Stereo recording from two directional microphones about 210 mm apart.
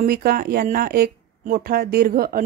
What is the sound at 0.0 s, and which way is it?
Speech, 45° right (ahead or behind).